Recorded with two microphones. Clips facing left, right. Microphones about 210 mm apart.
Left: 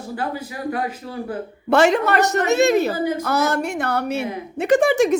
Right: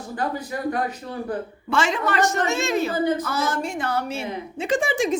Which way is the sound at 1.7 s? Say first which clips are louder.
Left 7 dB; 65° left (ahead or behind).